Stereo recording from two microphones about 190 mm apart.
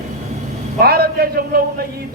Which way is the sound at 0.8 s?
55° right (ahead or behind).